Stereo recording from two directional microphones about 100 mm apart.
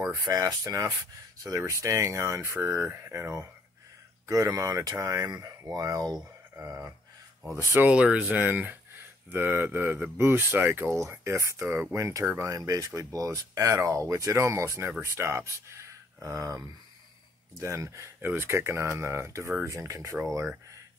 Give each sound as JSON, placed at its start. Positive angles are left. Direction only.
{"t": 0.0, "sound": "speech", "side_deg": -25}
{"t": 0.3, "sound": "speech", "side_deg": -40}
{"t": 12.4, "sound": "speech", "side_deg": -35}